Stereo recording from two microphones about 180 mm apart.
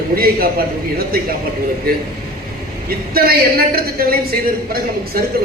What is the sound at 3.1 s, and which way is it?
A woman's voice, 55° right (ahead or behind).